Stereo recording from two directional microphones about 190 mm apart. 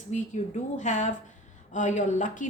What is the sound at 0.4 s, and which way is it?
Speech, 35° left (ahead or behind).